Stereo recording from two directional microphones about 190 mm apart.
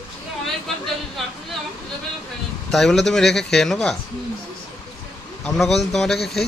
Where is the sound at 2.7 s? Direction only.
Centre (ahead or behind).